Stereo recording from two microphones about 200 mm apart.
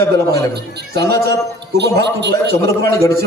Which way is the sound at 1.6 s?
60° right (ahead or behind).